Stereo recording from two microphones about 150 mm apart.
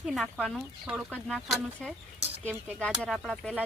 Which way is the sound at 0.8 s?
10° right (ahead or behind).